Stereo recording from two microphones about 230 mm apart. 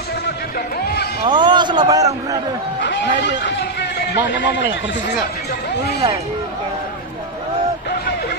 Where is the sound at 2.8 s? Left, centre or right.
Left.